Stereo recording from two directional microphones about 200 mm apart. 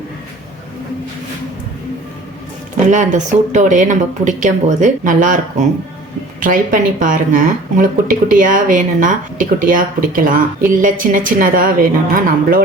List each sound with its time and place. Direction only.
2.9 s speech: 40° right (ahead or behind)